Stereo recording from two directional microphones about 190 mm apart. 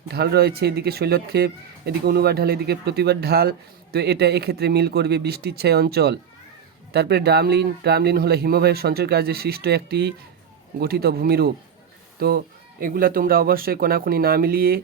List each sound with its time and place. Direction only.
0.1 s speech: 55° right (ahead or behind)